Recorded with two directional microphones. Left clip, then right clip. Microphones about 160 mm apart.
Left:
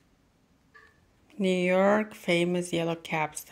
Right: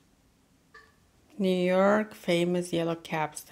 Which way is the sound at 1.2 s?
5° right (ahead or behind).